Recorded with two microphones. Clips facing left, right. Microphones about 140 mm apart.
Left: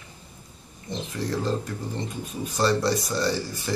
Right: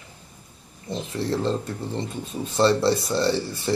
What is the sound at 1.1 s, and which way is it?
Speech, 30° right (ahead or behind).